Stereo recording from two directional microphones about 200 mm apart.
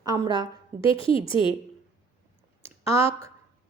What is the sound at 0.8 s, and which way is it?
Speech, 25° left (ahead or behind).